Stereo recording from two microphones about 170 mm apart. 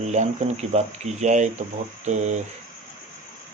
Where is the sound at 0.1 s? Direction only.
40° right (ahead or behind).